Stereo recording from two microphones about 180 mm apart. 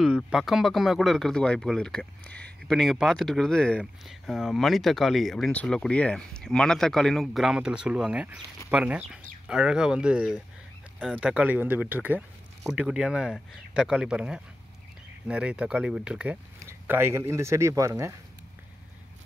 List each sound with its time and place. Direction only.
0.0 s speech: centre (ahead or behind)